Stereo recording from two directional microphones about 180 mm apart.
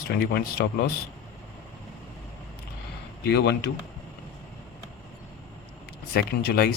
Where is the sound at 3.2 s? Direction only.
70° left (ahead or behind).